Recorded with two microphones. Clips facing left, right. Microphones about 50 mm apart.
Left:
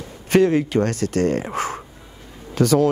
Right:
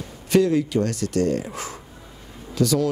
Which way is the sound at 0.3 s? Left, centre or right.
Left.